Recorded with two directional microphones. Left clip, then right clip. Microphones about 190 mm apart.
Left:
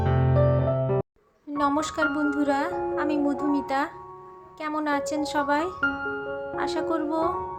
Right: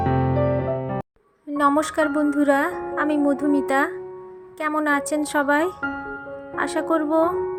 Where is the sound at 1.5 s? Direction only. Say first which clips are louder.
Right 5 dB; 25° right (ahead or behind).